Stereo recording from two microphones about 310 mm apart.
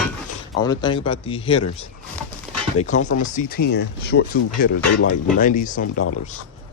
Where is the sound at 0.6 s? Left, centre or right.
Centre.